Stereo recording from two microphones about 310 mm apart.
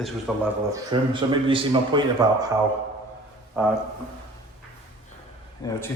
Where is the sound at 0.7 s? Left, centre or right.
Centre.